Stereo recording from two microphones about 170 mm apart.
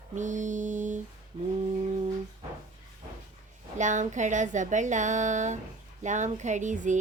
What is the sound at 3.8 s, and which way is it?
Music, 45° right (ahead or behind).